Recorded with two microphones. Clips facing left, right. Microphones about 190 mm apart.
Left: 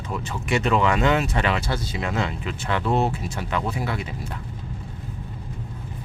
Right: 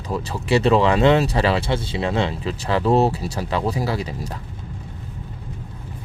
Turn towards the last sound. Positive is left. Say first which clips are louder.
# right 4 dB
turn(degrees=-40)  # may be behind; listen again after turning